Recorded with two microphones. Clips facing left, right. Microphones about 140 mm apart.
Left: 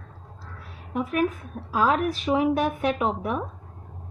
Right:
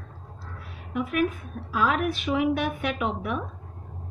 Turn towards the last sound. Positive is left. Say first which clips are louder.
# left 3 dB
turn(degrees=35)  # may be behind; listen again after turning